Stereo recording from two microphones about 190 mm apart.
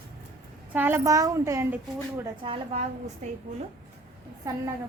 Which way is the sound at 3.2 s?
40° right (ahead or behind).